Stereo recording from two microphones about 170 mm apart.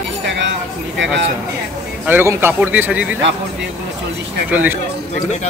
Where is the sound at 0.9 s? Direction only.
90° right.